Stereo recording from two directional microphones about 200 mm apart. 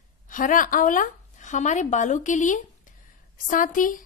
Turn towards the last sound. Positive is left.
turn(degrees=40)  # may be behind; listen again after turning